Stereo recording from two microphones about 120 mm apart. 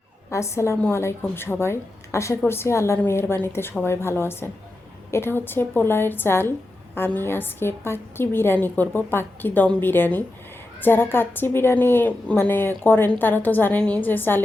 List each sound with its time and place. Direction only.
0.3 s a woman's voice: 25° left (ahead or behind)